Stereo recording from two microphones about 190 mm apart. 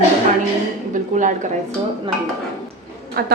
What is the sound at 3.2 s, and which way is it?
Speech, 55° right (ahead or behind).